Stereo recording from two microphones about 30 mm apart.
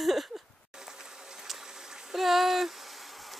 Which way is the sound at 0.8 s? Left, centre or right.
Centre.